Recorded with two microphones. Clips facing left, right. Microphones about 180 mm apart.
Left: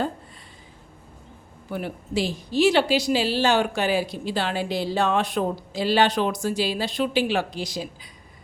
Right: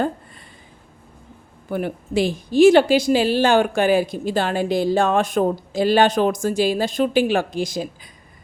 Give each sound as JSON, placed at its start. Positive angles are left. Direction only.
{"t": 1.7, "sound": "speech", "side_deg": -50}